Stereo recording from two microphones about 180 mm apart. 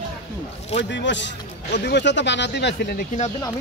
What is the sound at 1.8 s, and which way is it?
Speech, 70° left (ahead or behind).